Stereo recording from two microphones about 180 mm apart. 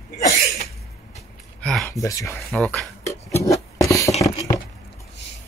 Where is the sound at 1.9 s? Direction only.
15° left (ahead or behind).